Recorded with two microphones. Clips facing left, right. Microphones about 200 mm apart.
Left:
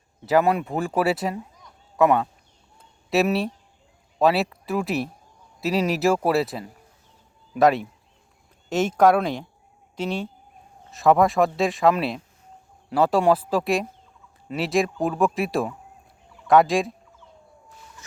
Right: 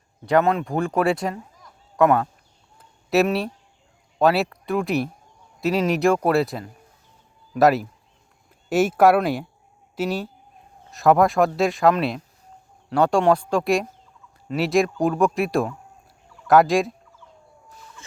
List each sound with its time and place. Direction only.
0.3 s speech: 10° left (ahead or behind)